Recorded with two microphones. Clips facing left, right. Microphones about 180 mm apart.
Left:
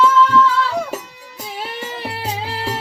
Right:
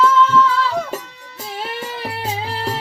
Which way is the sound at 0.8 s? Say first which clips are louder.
Even; 5° left (ahead or behind).